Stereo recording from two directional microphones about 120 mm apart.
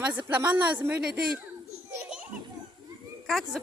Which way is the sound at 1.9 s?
10° right (ahead or behind).